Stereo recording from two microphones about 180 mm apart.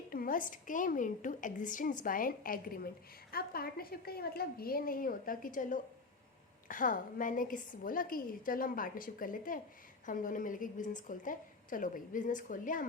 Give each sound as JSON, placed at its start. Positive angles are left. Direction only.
{"t": 0.1, "sound": "a woman's voice", "side_deg": 50}